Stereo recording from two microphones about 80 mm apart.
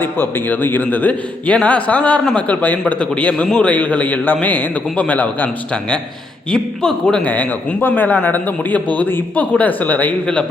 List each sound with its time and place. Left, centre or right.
0.0 s a man's voice: left
6.5 s a man's voice: centre